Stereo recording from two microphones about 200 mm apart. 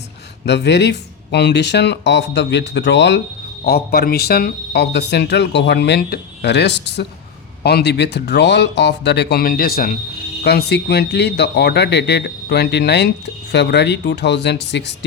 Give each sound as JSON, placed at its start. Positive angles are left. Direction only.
{"t": 0.4, "sound": "speech", "side_deg": 60}
{"t": 3.6, "sound": "speech", "side_deg": 50}